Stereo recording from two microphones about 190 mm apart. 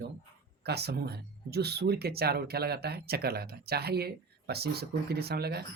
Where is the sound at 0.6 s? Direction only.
60° right (ahead or behind).